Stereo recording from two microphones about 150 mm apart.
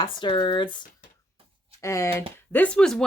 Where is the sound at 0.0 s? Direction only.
30° left (ahead or behind).